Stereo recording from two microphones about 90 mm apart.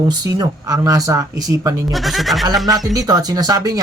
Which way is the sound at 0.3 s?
45° right (ahead or behind).